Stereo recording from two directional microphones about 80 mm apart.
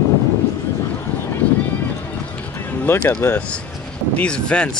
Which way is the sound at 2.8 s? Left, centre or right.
Left.